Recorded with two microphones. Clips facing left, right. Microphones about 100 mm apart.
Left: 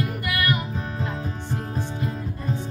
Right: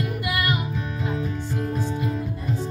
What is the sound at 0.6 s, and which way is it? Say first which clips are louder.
Music: right 1 dB; 35° left (ahead or behind).